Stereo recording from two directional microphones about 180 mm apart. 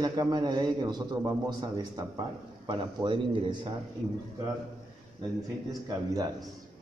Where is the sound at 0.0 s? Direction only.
20° right (ahead or behind).